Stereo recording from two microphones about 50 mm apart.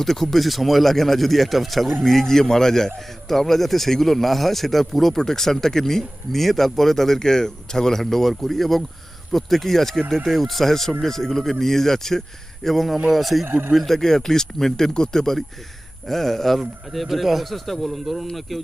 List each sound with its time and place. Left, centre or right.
0.0 s speech: centre
13.4 s speech: right
13.7 s speech: centre